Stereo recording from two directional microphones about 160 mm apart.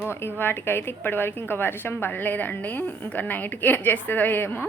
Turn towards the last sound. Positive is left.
turn(degrees=10)  # may be behind; listen again after turning